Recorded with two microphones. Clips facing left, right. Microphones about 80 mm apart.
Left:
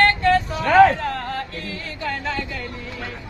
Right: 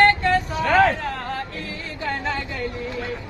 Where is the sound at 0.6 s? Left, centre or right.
Centre.